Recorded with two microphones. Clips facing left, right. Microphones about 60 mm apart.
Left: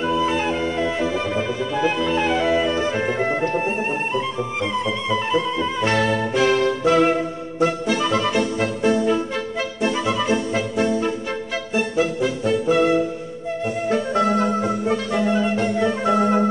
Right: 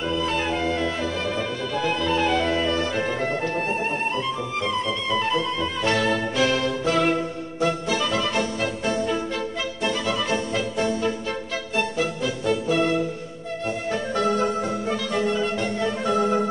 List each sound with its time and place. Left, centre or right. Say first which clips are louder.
0.0 s music: left 4 dB; centre
5.3 s music: left 3 dB; centre